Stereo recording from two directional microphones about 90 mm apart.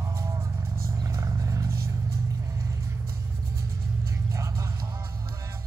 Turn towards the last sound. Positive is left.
turn(degrees=-35)  # may be behind; listen again after turning